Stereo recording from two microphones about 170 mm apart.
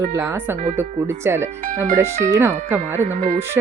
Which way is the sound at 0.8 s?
15° right (ahead or behind).